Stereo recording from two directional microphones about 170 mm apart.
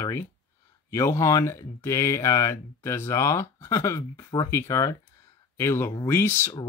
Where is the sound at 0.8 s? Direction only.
15° left (ahead or behind).